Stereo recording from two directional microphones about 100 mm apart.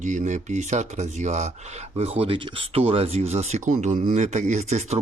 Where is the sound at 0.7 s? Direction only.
90° right.